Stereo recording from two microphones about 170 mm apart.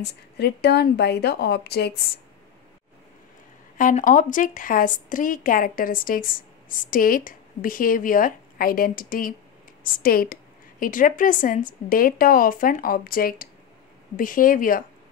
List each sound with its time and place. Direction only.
0.0 s a woman's voice: 75° left (ahead or behind)
3.7 s a woman's voice: 50° left (ahead or behind)